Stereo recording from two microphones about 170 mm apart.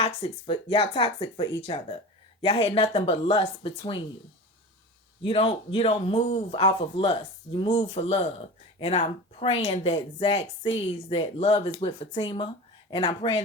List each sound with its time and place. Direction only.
0.0 s speech: 35° left (ahead or behind)
5.2 s speech: 35° left (ahead or behind)